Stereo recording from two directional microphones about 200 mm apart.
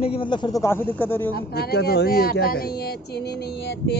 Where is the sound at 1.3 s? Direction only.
50° left (ahead or behind).